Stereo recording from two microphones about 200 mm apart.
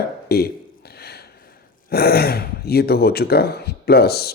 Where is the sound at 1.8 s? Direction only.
50° left (ahead or behind).